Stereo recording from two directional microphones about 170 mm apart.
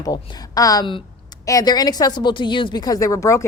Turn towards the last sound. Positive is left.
turn(degrees=15)  # may be behind; listen again after turning